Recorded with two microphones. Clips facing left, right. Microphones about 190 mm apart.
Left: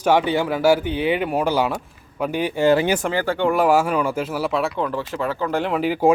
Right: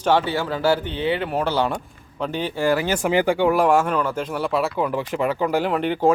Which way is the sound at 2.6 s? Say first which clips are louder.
Left 4 dB; 20° left (ahead or behind).